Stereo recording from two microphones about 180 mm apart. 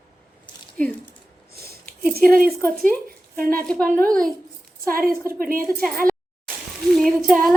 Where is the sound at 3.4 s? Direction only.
50° right (ahead or behind).